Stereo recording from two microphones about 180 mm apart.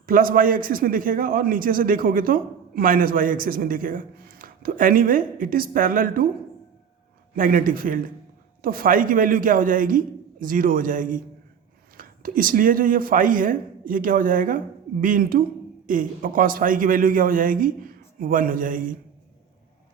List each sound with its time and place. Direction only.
0.0 s a man's voice: 50° right (ahead or behind)
7.3 s a man's voice: 50° right (ahead or behind)